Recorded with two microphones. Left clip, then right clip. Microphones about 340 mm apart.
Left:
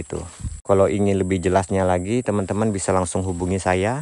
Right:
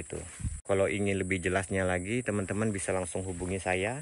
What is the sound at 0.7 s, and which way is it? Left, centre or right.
Speech, centre.